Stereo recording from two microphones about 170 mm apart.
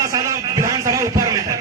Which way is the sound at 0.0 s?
20° right (ahead or behind).